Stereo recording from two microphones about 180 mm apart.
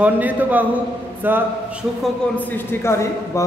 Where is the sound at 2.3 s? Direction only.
10° left (ahead or behind).